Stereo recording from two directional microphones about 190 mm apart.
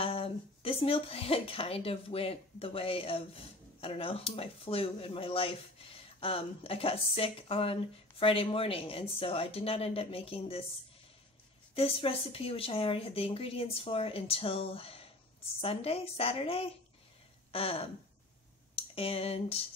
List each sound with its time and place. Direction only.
0.0 s speech: 30° left (ahead or behind)
11.7 s speech: 30° left (ahead or behind)
18.8 s a sound: 30° left (ahead or behind)